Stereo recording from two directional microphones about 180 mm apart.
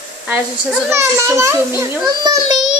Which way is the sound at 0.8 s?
15° right (ahead or behind).